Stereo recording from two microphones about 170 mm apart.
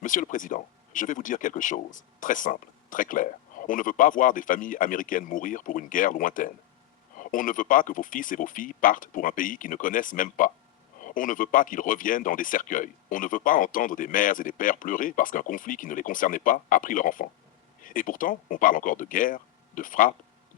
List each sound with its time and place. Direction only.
0.0 s speech: 50° left (ahead or behind)